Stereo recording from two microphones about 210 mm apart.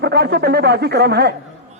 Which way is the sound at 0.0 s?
50° right (ahead or behind).